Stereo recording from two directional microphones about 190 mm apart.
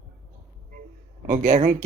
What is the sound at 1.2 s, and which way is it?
Speech, 45° right (ahead or behind).